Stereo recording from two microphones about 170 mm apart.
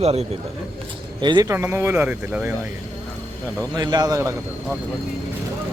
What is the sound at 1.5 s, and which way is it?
Speech, 15° right (ahead or behind).